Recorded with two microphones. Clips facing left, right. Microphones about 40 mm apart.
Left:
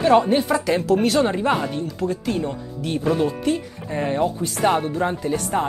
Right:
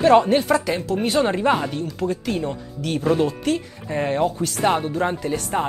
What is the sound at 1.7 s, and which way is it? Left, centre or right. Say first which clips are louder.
Speech: even; right.